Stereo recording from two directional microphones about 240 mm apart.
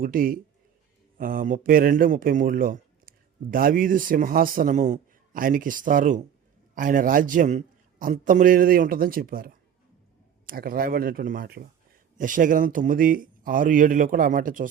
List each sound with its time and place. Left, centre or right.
0.0 s a man's voice: right